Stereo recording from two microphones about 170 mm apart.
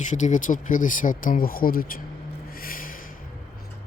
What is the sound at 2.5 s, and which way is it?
Snort, 60° left (ahead or behind).